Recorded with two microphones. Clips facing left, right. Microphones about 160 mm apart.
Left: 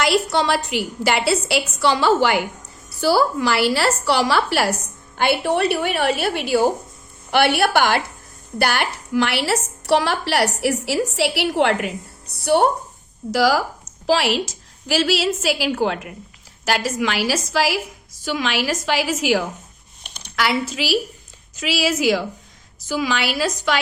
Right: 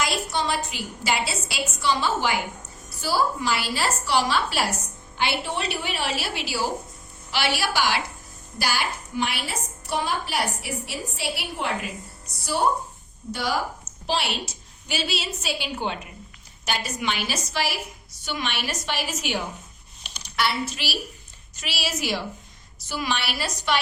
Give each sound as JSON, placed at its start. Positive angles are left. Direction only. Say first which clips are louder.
{"t": 0.0, "sound": "a woman's voice", "louder": "left 8 dB", "side_deg": 75}
{"t": 5.1, "sound": "a woman's voice", "louder": "left 8 dB", "side_deg": 50}
{"t": 13.3, "sound": "a woman's voice", "louder": "left 9 dB", "side_deg": 90}
{"t": 20.0, "sound": "a sound", "louder": "left 2 dB", "side_deg": 55}
{"t": 20.3, "sound": "a woman's voice", "louder": "left 5 dB", "side_deg": 90}